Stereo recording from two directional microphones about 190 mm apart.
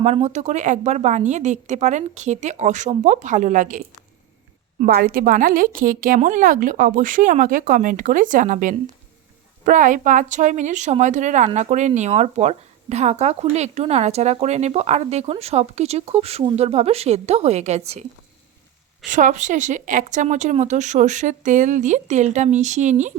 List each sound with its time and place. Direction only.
0.0 s a woman's voice: 35° right (ahead or behind)
19.0 s speech: 40° right (ahead or behind)